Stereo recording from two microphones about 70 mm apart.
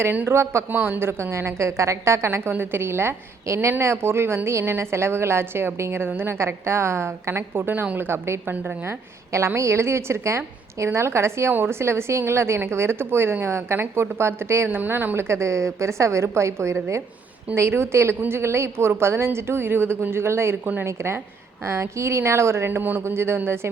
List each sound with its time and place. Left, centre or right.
0.3 s a woman's voice: right
0.7 s a woman's voice: right
9.6 s a woman's voice: right
14.7 s a woman's voice: right
22.8 s speech: right
23.0 s a woman's voice: right